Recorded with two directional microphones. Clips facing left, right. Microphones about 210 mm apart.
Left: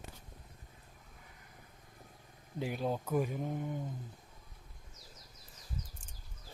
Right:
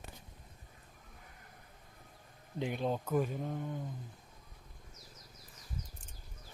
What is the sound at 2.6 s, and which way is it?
Speech, 5° left (ahead or behind).